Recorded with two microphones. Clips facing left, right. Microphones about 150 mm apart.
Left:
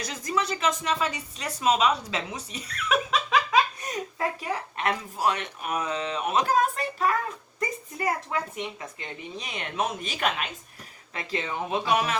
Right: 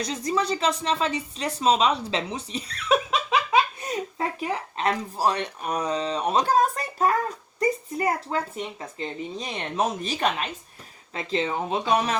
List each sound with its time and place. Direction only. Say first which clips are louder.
0.1 s speech: right 2 dB; 30° right (ahead or behind)
7.6 s a sound: right 6 dB; 30° right (ahead or behind)
8.8 s speech: right 6 dB; 30° right (ahead or behind)